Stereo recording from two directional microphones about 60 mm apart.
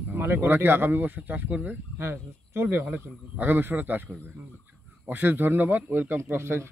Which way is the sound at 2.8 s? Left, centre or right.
Right.